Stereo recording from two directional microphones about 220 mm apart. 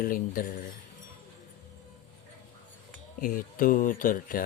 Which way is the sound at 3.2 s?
40° left (ahead or behind).